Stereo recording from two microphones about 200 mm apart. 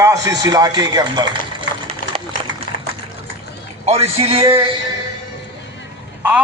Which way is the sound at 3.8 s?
30° right (ahead or behind).